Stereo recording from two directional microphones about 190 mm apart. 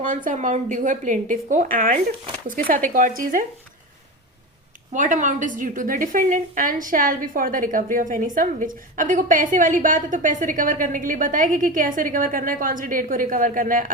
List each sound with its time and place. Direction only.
0.3 s a woman's voice: 40° right (ahead or behind)
4.9 s a woman's voice: 40° right (ahead or behind)